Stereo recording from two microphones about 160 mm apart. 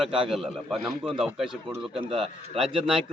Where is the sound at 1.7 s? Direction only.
35° right (ahead or behind).